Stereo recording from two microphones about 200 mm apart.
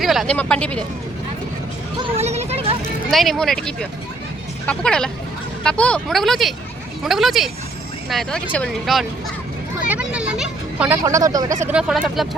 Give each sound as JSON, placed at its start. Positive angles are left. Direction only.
{"t": 0.0, "sound": "speech", "side_deg": 0}
{"t": 2.0, "sound": "a sound", "side_deg": -30}
{"t": 3.1, "sound": "speech", "side_deg": 0}
{"t": 11.6, "sound": "speech", "side_deg": -5}